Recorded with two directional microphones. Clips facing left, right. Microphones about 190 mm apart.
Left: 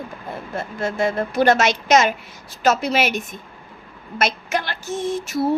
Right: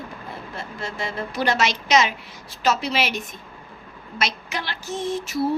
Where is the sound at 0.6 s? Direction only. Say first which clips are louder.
Left 10 dB; 50° left (ahead or behind).